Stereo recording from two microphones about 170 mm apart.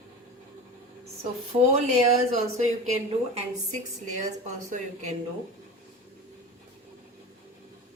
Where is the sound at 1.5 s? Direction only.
40° right (ahead or behind).